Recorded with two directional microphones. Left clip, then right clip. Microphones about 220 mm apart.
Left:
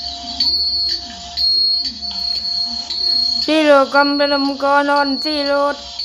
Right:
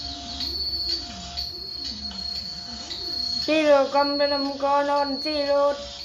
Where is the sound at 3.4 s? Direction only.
20° left (ahead or behind).